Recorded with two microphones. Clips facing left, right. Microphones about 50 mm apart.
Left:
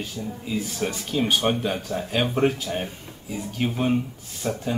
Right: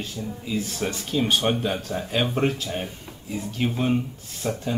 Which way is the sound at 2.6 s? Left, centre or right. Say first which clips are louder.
Left 1 dB; centre.